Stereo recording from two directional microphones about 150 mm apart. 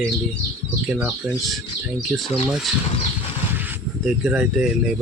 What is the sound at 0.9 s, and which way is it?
Speech, 10° right (ahead or behind).